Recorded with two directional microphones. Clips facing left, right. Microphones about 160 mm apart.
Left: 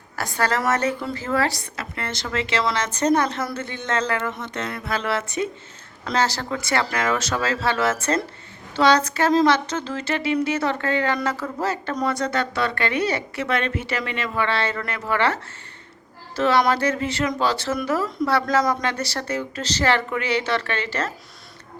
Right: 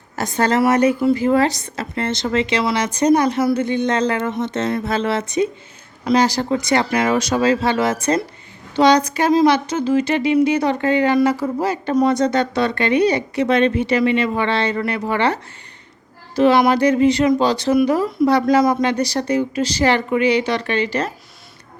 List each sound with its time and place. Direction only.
0.2 s speech: 20° right (ahead or behind)